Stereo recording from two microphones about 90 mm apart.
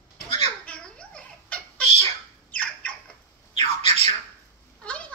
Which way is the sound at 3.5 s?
70° left (ahead or behind).